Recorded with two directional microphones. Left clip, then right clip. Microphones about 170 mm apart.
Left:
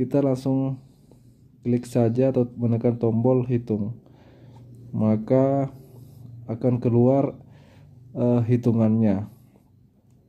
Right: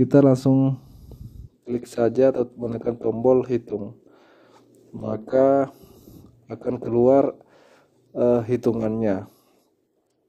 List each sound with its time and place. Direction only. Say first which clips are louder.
0.0 s speech: right 6 dB; 35° right (ahead or behind)
1.7 s speech: right 1 dB; 35° right (ahead or behind)
5.1 s speech: right 4 dB; 35° right (ahead or behind)